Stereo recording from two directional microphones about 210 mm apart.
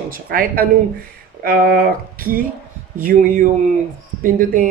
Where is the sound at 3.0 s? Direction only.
40° right (ahead or behind).